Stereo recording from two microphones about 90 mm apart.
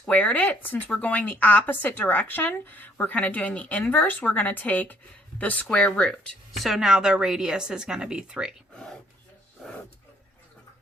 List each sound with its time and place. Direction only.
0.0 s speech: 15° left (ahead or behind)
6.6 s a woman's voice: 5° right (ahead or behind)
8.7 s a sound: 10° left (ahead or behind)